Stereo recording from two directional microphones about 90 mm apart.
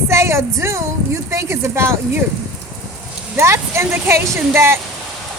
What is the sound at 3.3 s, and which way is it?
Speech, 30° right (ahead or behind).